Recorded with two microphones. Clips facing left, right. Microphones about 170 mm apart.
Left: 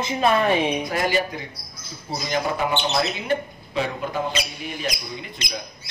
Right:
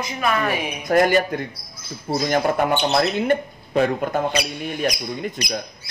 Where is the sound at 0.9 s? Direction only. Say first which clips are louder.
Right 6 dB; 50° right (ahead or behind).